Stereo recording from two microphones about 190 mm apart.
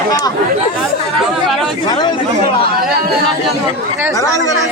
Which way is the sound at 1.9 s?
20° left (ahead or behind).